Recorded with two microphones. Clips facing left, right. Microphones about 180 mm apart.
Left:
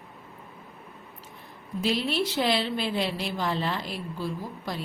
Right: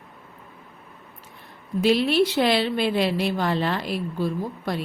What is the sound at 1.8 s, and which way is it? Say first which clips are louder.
A woman's voice: right 8 dB; 65° right (ahead or behind).